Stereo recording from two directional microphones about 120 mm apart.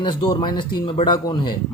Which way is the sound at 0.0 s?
40° left (ahead or behind).